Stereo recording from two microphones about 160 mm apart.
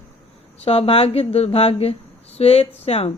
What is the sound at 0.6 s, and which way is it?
Speech, 35° left (ahead or behind).